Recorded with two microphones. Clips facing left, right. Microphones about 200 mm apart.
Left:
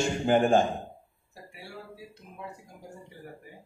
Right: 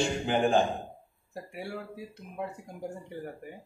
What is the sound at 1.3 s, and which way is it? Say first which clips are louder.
Speech: right 8 dB; 55° right (ahead or behind).